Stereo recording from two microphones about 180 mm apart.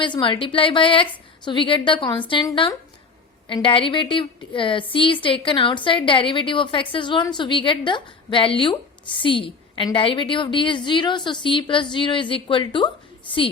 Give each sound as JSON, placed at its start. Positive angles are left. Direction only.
{"t": 0.0, "sound": "a woman's voice", "side_deg": 30}